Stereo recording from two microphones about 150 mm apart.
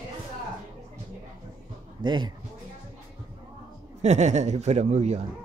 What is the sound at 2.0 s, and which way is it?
Speech, 30° right (ahead or behind).